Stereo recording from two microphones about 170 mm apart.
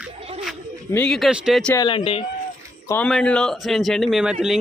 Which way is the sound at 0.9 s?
5° left (ahead or behind).